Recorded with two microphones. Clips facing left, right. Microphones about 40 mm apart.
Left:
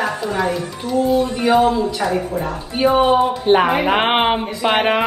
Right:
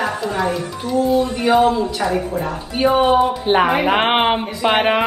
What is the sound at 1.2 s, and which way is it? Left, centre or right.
Speech, right.